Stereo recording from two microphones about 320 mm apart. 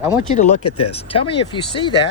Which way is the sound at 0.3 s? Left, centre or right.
Centre.